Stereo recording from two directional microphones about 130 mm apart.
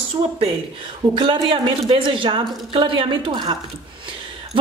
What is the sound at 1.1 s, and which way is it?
A woman's voice, 40° right (ahead or behind).